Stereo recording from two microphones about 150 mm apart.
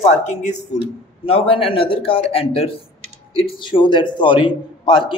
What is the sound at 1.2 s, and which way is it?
Speech, 35° left (ahead or behind).